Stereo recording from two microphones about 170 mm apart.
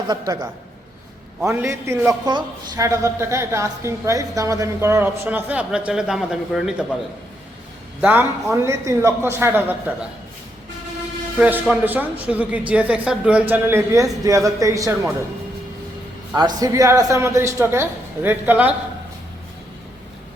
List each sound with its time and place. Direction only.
0.1 s a man's voice: 25° right (ahead or behind); by 6.8 s 5° right (ahead or behind)
8.0 s a man's voice: 10° right (ahead or behind)
11.3 s a man's voice: 10° right (ahead or behind)
16.3 s a man's voice: 20° right (ahead or behind)